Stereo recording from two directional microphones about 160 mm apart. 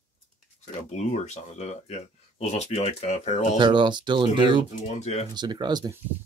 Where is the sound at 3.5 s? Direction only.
30° right (ahead or behind).